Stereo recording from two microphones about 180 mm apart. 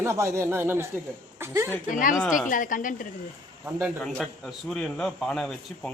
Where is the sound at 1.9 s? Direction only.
45° left (ahead or behind).